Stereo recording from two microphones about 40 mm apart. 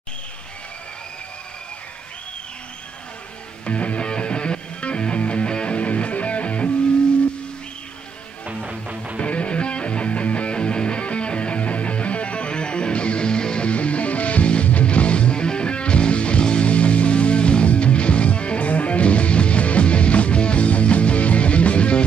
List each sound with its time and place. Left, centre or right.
3.6 s music: left
9.2 s music: left